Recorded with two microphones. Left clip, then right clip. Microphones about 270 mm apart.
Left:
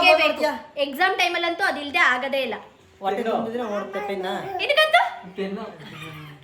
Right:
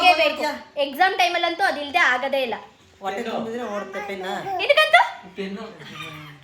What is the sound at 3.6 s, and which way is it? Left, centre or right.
Speech, centre.